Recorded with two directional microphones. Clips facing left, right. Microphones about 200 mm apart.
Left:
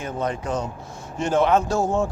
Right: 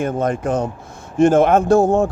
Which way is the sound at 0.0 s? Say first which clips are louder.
Right 7 dB; 50° right (ahead or behind).